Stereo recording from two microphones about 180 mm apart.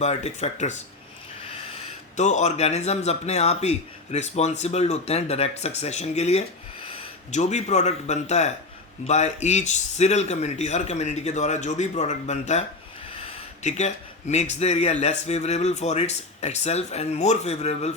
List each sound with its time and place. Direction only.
0.0 s a man's voice: 40° left (ahead or behind)
2.1 s a man's voice: 40° left (ahead or behind)